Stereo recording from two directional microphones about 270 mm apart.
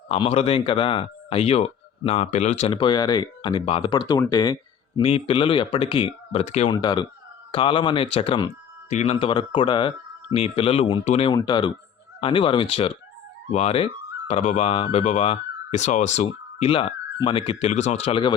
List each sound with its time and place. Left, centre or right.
0.1 s speech: left